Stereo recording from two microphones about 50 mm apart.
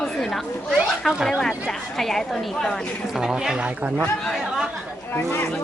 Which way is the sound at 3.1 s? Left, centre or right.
Centre.